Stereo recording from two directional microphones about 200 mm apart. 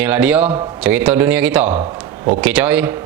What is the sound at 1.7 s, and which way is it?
Speech, 35° right (ahead or behind).